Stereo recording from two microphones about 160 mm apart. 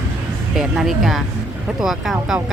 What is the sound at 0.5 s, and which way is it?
Speech, centre (ahead or behind).